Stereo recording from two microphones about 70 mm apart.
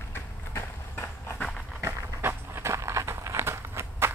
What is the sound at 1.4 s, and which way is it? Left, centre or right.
Walk, centre.